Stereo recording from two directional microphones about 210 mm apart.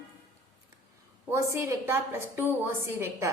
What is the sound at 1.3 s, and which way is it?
A woman's voice, 15° right (ahead or behind).